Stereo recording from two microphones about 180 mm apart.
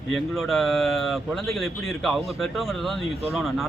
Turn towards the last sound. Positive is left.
turn(degrees=0)  # may be behind; listen again after turning